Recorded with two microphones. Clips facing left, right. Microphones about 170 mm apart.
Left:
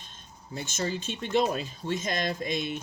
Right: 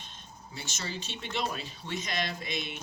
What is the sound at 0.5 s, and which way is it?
Speech, 50° left (ahead or behind).